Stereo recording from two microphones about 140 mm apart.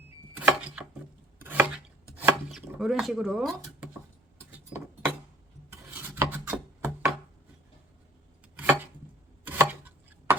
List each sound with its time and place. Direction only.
0.3 s chopping: 10° right (ahead or behind)
4.5 s keys jangling: 15° right (ahead or behind)
5.7 s filing: 20° right (ahead or behind)
9.4 s chopping: 10° right (ahead or behind)